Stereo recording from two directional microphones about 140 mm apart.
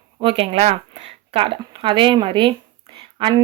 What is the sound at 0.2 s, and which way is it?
Speech, 40° right (ahead or behind).